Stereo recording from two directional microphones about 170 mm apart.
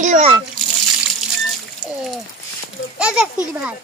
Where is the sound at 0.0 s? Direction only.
40° right (ahead or behind).